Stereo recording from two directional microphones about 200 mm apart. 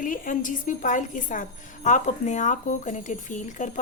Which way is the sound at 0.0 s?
40° left (ahead or behind).